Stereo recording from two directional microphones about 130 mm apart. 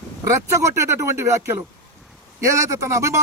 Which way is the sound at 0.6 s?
20° right (ahead or behind).